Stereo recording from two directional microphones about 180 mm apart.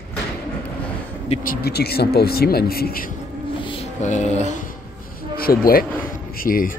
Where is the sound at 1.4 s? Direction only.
60° left (ahead or behind).